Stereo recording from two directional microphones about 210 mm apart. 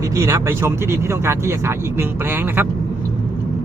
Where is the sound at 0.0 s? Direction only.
15° right (ahead or behind).